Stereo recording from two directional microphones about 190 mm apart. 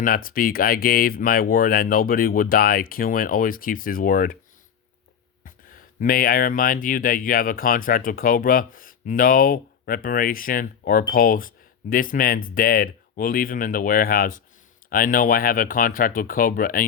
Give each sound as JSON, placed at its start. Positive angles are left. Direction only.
{"t": 0.0, "sound": "speech", "side_deg": 50}
{"t": 5.5, "sound": "speech", "side_deg": 45}